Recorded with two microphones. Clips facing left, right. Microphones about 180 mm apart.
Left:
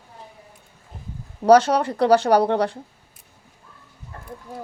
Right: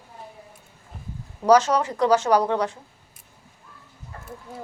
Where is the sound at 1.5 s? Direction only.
60° left (ahead or behind).